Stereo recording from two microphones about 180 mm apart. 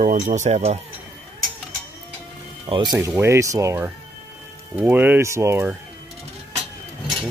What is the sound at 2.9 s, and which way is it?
Speech, 15° right (ahead or behind).